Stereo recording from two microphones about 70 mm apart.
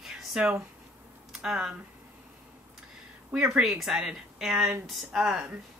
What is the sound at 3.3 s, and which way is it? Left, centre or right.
Speech, centre.